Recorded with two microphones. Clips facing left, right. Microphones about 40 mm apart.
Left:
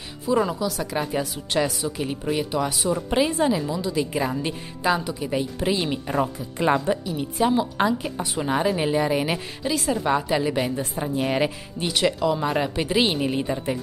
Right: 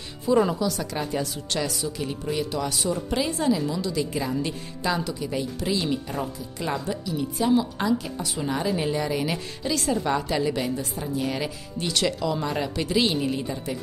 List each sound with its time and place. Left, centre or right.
0.2 s a woman's voice: centre; by 9.7 s left
9.7 s a woman's voice: centre; by 11.9 s left
11.9 s a woman's voice: centre